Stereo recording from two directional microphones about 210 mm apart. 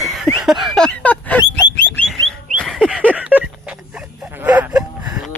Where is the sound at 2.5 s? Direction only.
Centre (ahead or behind).